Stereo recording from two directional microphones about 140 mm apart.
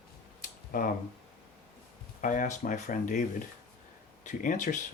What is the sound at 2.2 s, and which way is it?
Speech, 70° left (ahead or behind).